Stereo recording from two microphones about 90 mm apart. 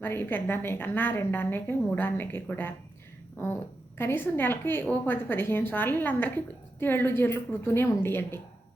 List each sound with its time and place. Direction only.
0.0 s a woman's voice: 25° left (ahead or behind)